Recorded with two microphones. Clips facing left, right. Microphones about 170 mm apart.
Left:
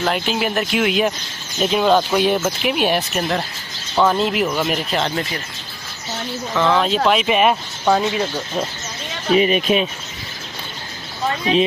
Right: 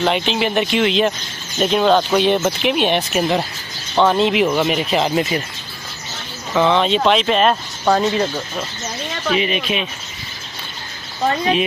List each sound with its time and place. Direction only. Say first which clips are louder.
0.0 s speech: right 2 dB; centre (ahead or behind)
6.5 s speech: right 2 dB; centre (ahead or behind)
7.8 s speech: right 1 dB; centre (ahead or behind)
9.3 s speech: left 5 dB; 40° left (ahead or behind)